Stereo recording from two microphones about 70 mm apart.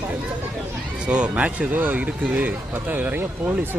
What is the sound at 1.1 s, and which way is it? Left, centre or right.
Speech, centre.